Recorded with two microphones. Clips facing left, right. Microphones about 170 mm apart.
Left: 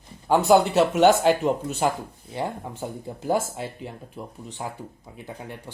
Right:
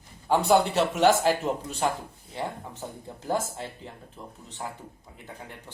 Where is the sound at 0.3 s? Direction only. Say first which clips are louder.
Left 4 dB; centre (ahead or behind).